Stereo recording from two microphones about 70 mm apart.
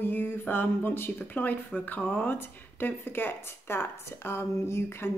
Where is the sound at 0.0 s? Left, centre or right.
Left.